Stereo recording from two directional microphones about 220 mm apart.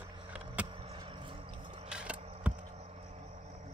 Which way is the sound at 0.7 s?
25° right (ahead or behind).